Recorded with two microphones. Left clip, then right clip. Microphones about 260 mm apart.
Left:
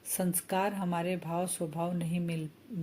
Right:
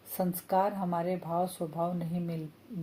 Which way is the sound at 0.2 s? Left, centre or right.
Left.